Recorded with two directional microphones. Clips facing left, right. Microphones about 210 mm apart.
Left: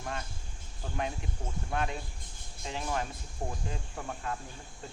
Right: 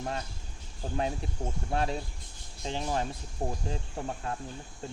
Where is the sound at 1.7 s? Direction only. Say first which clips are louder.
Right 3 dB; 35° right (ahead or behind).